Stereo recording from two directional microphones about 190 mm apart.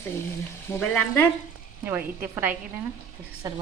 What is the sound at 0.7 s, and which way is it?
Frying, 10° left (ahead or behind).